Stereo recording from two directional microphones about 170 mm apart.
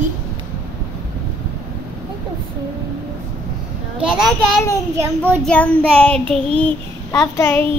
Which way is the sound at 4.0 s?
Centre (ahead or behind).